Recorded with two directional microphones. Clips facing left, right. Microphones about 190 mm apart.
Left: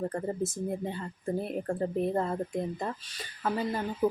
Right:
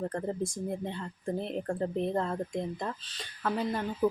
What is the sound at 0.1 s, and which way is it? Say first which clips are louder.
A woman's voice: left 1 dB; 5° left (ahead or behind).